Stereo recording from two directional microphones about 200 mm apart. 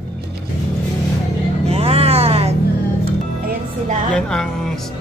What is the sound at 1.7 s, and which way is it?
Music, 30° right (ahead or behind).